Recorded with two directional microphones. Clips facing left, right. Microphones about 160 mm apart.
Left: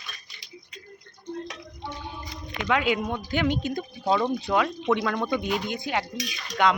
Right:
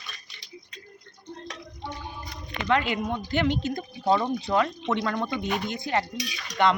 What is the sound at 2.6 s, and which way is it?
Speech, 5° left (ahead or behind).